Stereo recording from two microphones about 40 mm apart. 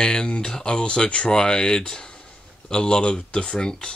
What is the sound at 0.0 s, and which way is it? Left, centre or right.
Speech, left.